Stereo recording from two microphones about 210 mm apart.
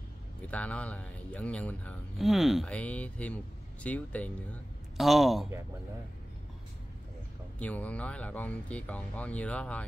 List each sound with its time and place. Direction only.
0.5 s speech: 5° left (ahead or behind)
7.5 s speech: 5° left (ahead or behind)